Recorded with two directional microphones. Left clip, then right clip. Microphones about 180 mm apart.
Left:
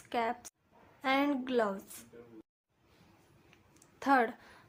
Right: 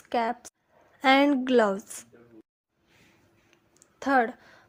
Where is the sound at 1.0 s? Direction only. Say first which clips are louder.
Right 10 dB; 45° right (ahead or behind).